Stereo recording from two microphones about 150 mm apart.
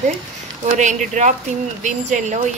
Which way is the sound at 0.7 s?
55° right (ahead or behind).